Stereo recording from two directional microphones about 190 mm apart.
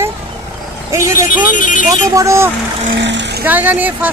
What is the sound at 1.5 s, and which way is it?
Speech, 45° left (ahead or behind).